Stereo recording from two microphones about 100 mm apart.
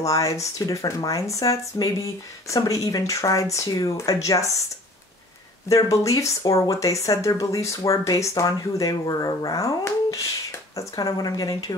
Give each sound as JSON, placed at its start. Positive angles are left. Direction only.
{"t": 0.0, "sound": "speech", "side_deg": 35}
{"t": 5.7, "sound": "speech", "side_deg": 35}
{"t": 10.8, "sound": "speech", "side_deg": 40}